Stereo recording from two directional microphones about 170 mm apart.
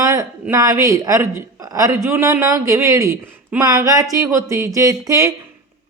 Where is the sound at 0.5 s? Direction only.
20° right (ahead or behind).